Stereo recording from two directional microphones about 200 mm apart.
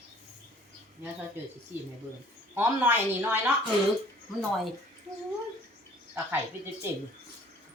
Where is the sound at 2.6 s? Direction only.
10° right (ahead or behind).